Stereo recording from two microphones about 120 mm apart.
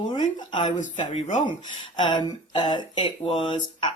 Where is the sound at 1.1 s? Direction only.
90° left.